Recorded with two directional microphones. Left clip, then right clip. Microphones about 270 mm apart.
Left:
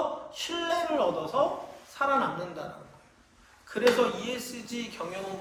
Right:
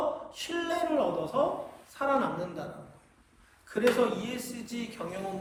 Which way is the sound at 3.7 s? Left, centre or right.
Centre.